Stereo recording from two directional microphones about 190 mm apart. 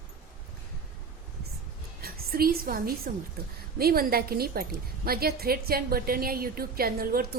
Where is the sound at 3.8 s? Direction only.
50° right (ahead or behind).